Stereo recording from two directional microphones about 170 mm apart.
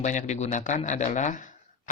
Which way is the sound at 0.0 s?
45° left (ahead or behind).